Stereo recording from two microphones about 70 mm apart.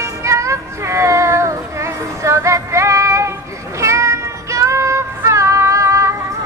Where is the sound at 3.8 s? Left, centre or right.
Right.